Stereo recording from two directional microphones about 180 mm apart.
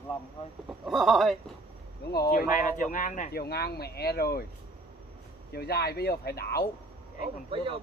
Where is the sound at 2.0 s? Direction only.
60° left (ahead or behind).